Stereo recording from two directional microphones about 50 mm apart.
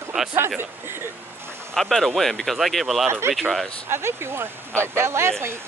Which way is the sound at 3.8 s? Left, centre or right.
Right.